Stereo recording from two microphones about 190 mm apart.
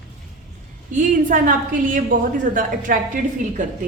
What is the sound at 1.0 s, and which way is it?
A woman's voice, 45° right (ahead or behind).